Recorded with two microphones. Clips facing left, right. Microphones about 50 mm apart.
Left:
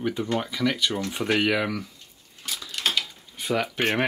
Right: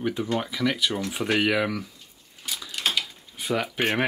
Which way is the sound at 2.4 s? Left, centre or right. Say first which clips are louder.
Even; centre.